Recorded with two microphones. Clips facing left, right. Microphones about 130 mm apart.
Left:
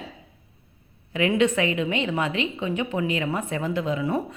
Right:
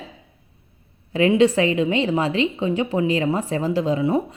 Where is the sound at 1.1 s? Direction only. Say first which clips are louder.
Right 5 dB; 30° right (ahead or behind).